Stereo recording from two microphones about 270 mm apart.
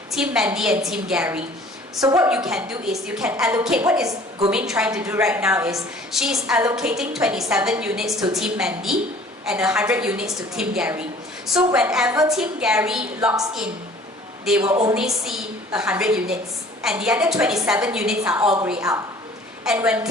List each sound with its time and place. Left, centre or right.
0.1 s a woman's voice: centre
14.6 s a woman's voice: centre
14.9 s a woman's voice: centre